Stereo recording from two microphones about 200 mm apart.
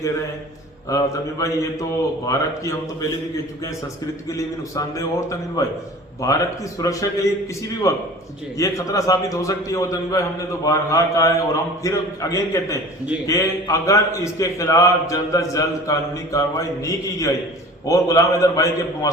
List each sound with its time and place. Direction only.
0.9 s a man's voice: 15° left (ahead or behind)
4.3 s a man's voice: 15° left (ahead or behind)